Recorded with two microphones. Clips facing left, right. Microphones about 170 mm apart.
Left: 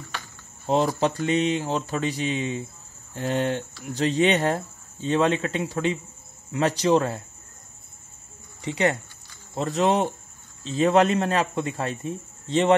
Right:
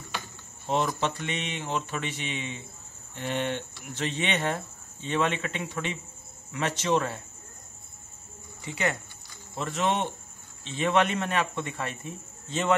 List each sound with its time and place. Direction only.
0.7 s speech: 35° left (ahead or behind)
9.6 s speech: 35° left (ahead or behind)